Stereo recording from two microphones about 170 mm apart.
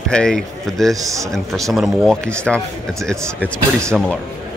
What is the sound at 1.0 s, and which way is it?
Speech, 20° right (ahead or behind).